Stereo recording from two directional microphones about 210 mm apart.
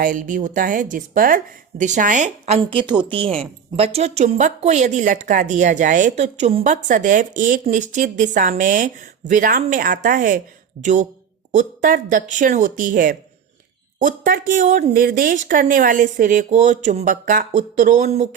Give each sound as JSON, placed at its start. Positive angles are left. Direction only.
{"t": 0.0, "sound": "speech", "side_deg": -40}